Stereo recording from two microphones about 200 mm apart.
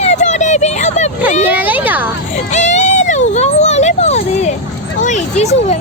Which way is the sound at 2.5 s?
35° left (ahead or behind).